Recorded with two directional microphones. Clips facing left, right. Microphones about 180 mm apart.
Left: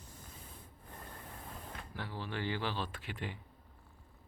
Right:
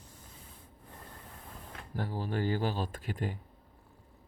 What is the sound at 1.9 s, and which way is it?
Speech, 45° right (ahead or behind).